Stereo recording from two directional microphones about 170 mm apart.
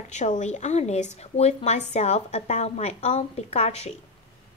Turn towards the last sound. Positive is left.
turn(degrees=40)  # may be behind; listen again after turning